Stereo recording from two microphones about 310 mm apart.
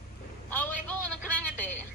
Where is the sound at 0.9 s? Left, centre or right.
Left.